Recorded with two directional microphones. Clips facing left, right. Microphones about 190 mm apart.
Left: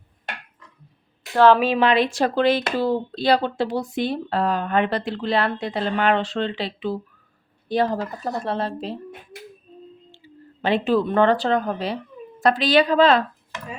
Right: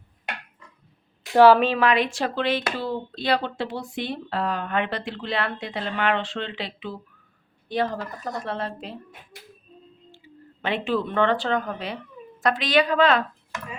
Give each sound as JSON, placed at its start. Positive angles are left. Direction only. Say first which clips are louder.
{"t": 1.3, "sound": "a woman's voice", "louder": "right 1 dB", "side_deg": -10}
{"t": 1.5, "sound": "a woman's voice", "louder": "left 1 dB", "side_deg": 10}
{"t": 1.8, "sound": "speech", "louder": "left 3 dB", "side_deg": 30}
{"t": 10.2, "sound": "a sound", "louder": "left 2 dB", "side_deg": 30}
{"t": 10.6, "sound": "speech", "louder": "left 5 dB", "side_deg": 40}